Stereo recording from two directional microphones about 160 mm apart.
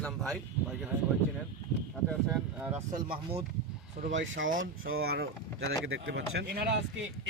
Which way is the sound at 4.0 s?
60° right (ahead or behind).